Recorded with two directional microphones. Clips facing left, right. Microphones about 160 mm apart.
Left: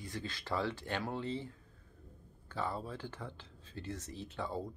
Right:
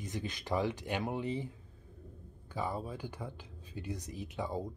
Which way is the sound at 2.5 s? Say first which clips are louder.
Right 2 dB; 10° right (ahead or behind).